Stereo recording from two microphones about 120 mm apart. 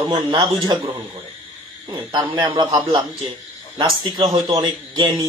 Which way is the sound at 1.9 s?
40° right (ahead or behind).